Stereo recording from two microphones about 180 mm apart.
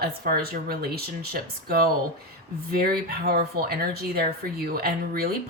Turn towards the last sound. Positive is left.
turn(degrees=-60)  # may be behind; listen again after turning